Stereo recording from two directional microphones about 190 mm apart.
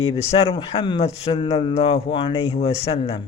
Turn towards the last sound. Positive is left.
turn(degrees=30)  # may be behind; listen again after turning